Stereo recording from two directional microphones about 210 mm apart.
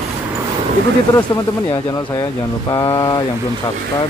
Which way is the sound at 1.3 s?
20° left (ahead or behind).